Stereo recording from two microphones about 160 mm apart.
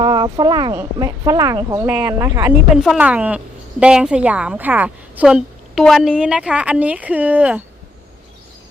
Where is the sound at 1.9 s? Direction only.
10° right (ahead or behind).